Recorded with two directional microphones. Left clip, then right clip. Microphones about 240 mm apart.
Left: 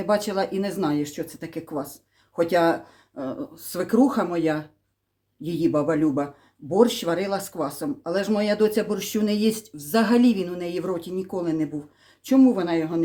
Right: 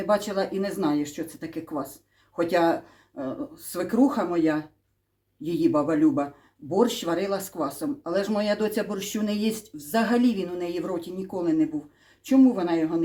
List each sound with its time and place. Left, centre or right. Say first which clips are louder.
0.0 s speech: left 1 dB; left